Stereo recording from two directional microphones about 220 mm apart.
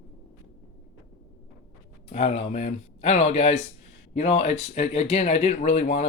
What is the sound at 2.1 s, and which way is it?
Speech, 30° left (ahead or behind).